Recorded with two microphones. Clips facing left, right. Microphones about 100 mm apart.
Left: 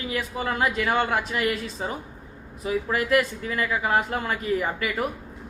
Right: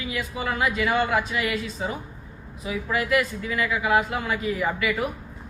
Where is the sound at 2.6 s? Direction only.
45° left (ahead or behind).